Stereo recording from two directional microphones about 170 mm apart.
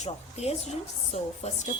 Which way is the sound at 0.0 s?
40° left (ahead or behind).